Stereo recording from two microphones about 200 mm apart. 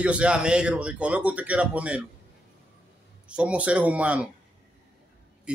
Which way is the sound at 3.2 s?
5° right (ahead or behind).